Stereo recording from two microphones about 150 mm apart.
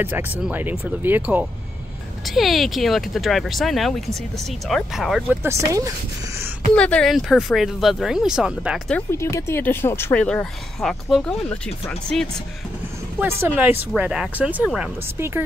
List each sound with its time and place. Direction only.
0.0 s speech: 10° right (ahead or behind)
5.3 s speech: 15° right (ahead or behind)
6.7 s speech: 5° left (ahead or behind)
8.9 s speech: 20° left (ahead or behind); by 11.5 s centre (ahead or behind)
13.2 s speech: 15° right (ahead or behind)